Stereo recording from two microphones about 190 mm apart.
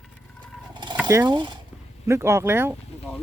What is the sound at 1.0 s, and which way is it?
Speech, 15° right (ahead or behind).